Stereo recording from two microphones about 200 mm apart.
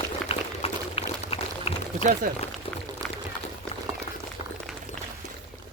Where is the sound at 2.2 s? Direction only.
45° right (ahead or behind).